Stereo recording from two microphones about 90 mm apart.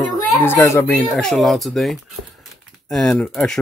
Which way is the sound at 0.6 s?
35° left (ahead or behind).